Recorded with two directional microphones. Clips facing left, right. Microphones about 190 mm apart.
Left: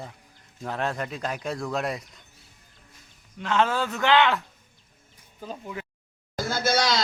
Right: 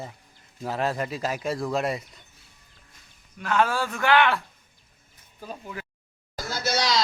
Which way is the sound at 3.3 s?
20° left (ahead or behind).